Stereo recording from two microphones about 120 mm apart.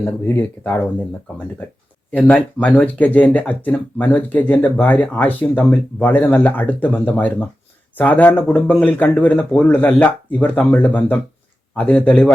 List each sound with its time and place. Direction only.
0.0 s speech: 20° left (ahead or behind)
2.1 s speech: 10° left (ahead or behind)